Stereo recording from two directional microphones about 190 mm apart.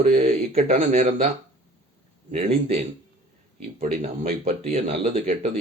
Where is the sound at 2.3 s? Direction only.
35° right (ahead or behind).